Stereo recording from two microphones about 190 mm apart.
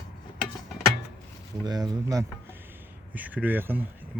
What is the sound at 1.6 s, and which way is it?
Speech, 20° right (ahead or behind).